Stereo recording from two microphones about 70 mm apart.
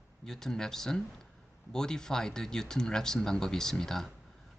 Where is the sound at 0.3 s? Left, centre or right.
Centre.